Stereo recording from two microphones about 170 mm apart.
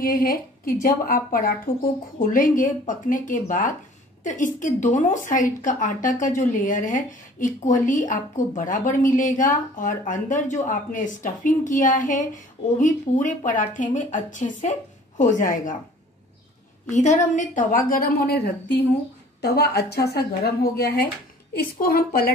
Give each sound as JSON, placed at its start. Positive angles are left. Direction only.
{"t": 0.0, "sound": "a woman's voice", "side_deg": 55}
{"t": 16.9, "sound": "a woman's voice", "side_deg": 45}